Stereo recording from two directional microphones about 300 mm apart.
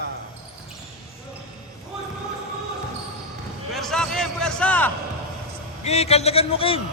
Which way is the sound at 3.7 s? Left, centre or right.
Centre.